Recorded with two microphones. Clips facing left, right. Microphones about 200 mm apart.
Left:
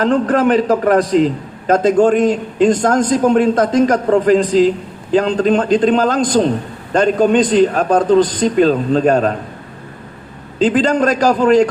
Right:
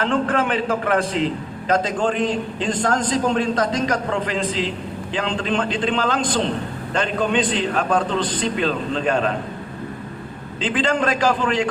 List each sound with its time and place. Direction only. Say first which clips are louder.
0.0 s a man's voice: left 7 dB; 40° left (ahead or behind)
10.6 s a man's voice: left 8 dB; 40° left (ahead or behind)